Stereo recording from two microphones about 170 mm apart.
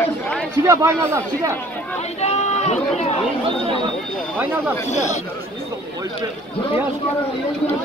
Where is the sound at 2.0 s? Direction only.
40° left (ahead or behind).